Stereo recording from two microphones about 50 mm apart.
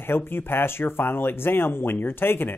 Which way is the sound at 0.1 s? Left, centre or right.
Left.